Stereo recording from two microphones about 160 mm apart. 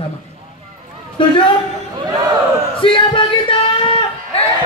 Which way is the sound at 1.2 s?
30° left (ahead or behind).